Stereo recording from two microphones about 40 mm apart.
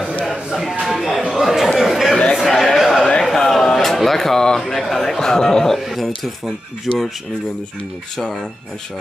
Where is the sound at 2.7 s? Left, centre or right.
Centre.